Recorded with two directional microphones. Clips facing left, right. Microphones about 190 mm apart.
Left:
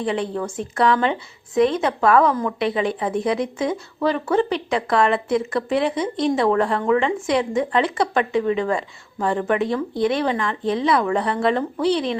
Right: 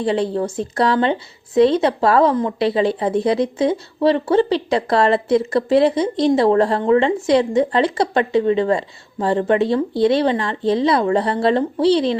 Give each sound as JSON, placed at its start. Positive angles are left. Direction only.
{"t": 0.0, "sound": "a woman's voice", "side_deg": -35}